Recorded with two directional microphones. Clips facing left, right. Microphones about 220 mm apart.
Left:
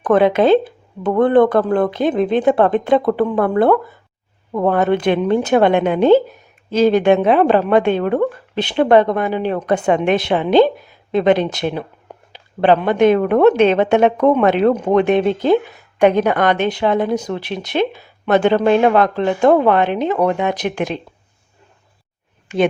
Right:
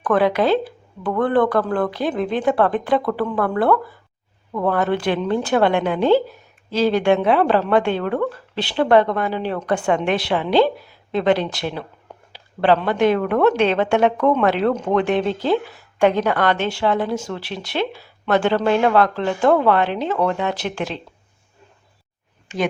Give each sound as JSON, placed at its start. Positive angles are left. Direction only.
{"t": 0.0, "sound": "a woman's voice", "side_deg": 20}